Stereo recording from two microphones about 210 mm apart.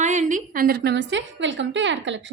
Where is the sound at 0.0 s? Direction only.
35° right (ahead or behind).